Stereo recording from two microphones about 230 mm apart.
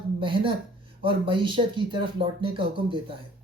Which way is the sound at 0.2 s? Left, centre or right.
Right.